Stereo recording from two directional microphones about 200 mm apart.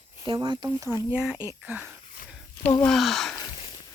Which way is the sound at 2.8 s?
Centre (ahead or behind).